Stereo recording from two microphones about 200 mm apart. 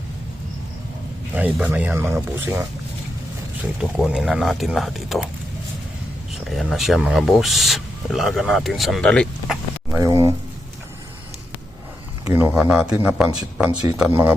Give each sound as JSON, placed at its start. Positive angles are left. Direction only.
{"t": 1.3, "sound": "speech", "side_deg": -5}
{"t": 3.8, "sound": "speech", "side_deg": -5}
{"t": 6.5, "sound": "speech", "side_deg": 0}
{"t": 10.0, "sound": "speech", "side_deg": -15}
{"t": 12.2, "sound": "speech", "side_deg": -10}